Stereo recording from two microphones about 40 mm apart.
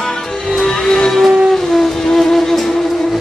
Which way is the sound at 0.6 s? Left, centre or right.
Centre.